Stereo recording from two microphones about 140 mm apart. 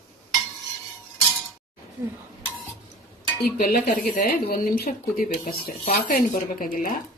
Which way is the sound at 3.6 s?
90° left.